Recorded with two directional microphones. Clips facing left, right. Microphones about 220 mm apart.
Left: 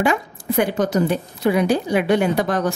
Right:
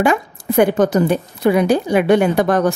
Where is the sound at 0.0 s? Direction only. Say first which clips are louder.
Right 4 dB; 50° right (ahead or behind).